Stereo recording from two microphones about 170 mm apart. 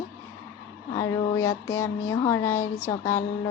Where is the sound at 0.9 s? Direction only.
15° left (ahead or behind).